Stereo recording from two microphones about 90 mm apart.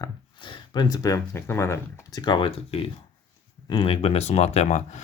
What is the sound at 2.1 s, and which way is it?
Speech, 55° left (ahead or behind).